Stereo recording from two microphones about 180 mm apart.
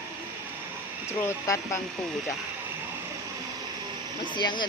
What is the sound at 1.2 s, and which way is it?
Speech, 15° left (ahead or behind).